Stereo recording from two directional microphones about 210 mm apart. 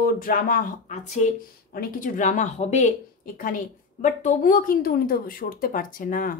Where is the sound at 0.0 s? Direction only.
40° left (ahead or behind).